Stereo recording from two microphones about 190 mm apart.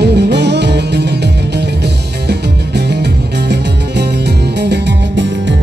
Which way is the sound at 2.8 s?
60° right (ahead or behind).